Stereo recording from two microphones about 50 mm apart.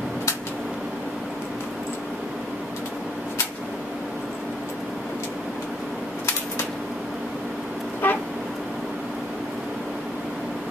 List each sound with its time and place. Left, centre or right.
8.0 s vehicle: left